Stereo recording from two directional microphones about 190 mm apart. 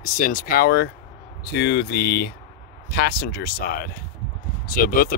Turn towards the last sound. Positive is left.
turn(degrees=50)  # may be behind; listen again after turning